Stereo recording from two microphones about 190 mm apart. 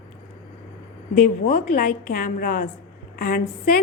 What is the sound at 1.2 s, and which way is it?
A woman's voice, 40° left (ahead or behind).